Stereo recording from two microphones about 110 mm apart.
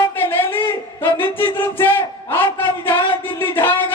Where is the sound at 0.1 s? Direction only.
20° left (ahead or behind).